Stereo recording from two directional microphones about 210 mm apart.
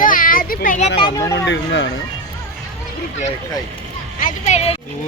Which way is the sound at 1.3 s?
60° left (ahead or behind).